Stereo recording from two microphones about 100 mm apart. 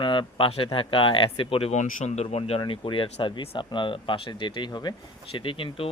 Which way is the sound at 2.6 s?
55° left (ahead or behind).